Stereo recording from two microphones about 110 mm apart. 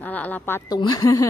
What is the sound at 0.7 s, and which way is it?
Speech, 35° left (ahead or behind).